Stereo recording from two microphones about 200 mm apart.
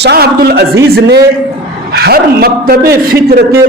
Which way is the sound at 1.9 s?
50° right (ahead or behind).